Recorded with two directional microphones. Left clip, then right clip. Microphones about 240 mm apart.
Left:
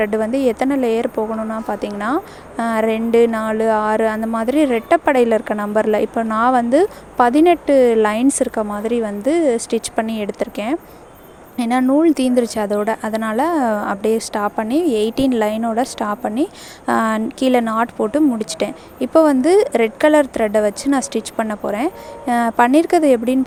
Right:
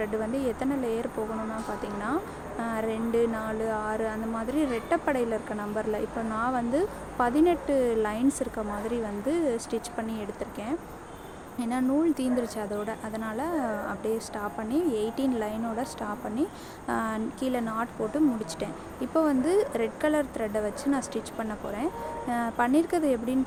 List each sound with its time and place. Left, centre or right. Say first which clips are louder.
0.0 s speech: left 12 dB; left